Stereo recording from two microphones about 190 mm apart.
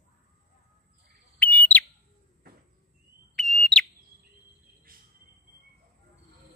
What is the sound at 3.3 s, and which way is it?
Fire alarm, centre (ahead or behind).